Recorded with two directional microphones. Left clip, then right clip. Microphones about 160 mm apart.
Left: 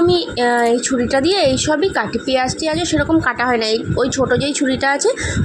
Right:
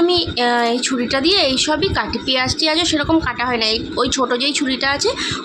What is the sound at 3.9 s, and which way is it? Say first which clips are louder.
Speech: left 3 dB; 10° left (ahead or behind).